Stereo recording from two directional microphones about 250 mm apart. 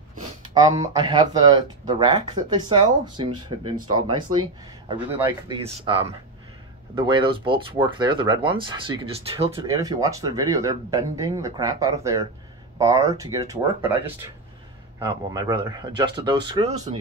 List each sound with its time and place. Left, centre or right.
0.6 s speech: centre
5.1 s speech: centre
5.6 s speech: right